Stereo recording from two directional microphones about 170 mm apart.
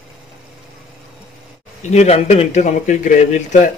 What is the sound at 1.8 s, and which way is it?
A man's voice, 40° left (ahead or behind).